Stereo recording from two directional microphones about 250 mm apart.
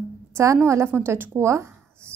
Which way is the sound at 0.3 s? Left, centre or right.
Centre.